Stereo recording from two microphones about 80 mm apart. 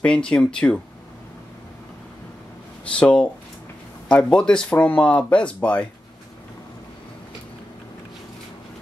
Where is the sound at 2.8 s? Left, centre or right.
Centre.